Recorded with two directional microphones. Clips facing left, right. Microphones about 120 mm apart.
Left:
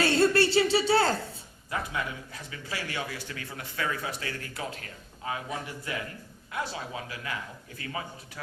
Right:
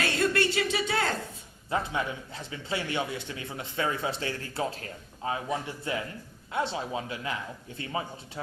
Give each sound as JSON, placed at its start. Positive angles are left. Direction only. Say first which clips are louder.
{"t": 0.0, "sound": "a woman's voice", "louder": "left 4 dB", "side_deg": 30}
{"t": 1.7, "sound": "a man's voice", "louder": "right 3 dB", "side_deg": -25}